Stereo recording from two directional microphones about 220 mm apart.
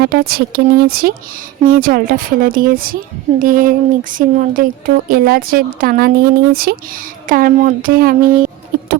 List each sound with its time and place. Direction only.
0.0 s speech: 45° right (ahead or behind)